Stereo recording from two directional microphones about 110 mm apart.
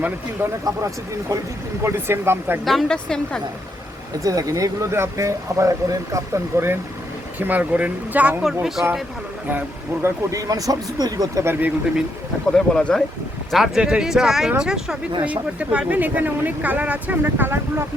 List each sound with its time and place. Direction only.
0.6 s speech: 30° right (ahead or behind)
2.6 s a woman's voice: 5° left (ahead or behind)
4.2 s speech: 35° right (ahead or behind); by 8.9 s 5° right (ahead or behind)
9.5 s speech: 15° right (ahead or behind)
10.3 s speech: 30° right (ahead or behind)
12.5 s a woman's voice: 5° left (ahead or behind); by 17.8 s 20° right (ahead or behind)